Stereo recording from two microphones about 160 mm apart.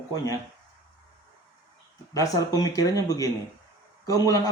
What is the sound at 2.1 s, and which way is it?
Speech, 20° left (ahead or behind).